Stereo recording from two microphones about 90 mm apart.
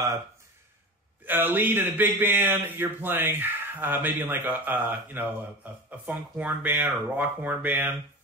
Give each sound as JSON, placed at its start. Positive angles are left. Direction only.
{"t": 1.2, "sound": "speech", "side_deg": -20}